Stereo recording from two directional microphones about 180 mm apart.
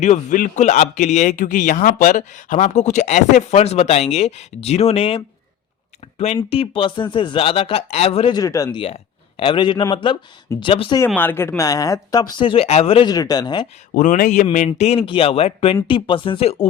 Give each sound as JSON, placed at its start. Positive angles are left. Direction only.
{"t": 0.0, "sound": "a man's voice", "side_deg": 40}
{"t": 8.4, "sound": "speech", "side_deg": 20}
{"t": 11.2, "sound": "speech", "side_deg": 10}
{"t": 13.9, "sound": "speech", "side_deg": 50}
{"t": 14.7, "sound": "a man's voice", "side_deg": 35}